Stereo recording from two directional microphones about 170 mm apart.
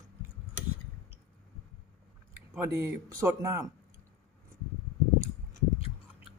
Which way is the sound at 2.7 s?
15° right (ahead or behind).